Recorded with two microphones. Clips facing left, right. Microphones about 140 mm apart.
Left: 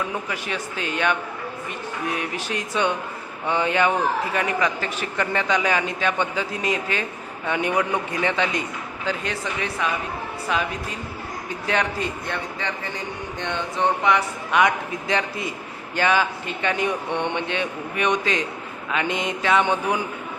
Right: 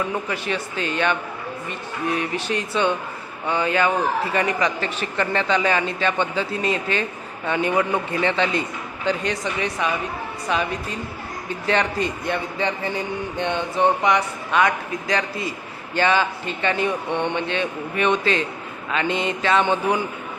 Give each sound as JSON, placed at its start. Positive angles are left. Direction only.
{"t": 0.3, "sound": "a man's voice", "side_deg": 10}
{"t": 4.4, "sound": "a man's voice", "side_deg": 10}
{"t": 12.3, "sound": "a man's voice", "side_deg": -20}
{"t": 14.0, "sound": "speech", "side_deg": 5}
{"t": 14.5, "sound": "a man's voice", "side_deg": 20}
{"t": 16.0, "sound": "a man's voice", "side_deg": 10}